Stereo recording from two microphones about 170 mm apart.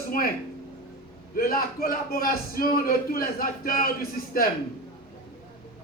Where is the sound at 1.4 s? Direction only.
60° left (ahead or behind).